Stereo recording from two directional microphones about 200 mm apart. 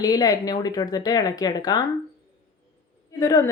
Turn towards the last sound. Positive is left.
turn(degrees=15)  # may be behind; listen again after turning